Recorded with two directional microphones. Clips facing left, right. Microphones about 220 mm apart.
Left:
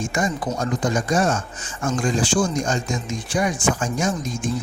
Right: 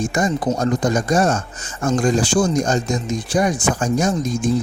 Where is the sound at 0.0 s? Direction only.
35° right (ahead or behind).